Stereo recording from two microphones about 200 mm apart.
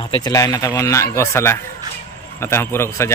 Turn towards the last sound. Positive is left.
turn(degrees=15)  # may be behind; listen again after turning